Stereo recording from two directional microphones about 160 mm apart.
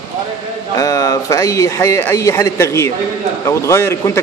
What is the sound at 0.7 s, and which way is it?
A man's voice, 20° left (ahead or behind).